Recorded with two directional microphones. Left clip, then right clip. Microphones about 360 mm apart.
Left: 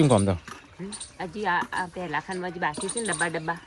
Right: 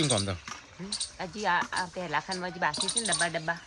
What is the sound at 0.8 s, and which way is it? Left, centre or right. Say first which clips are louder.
Speech: even; centre.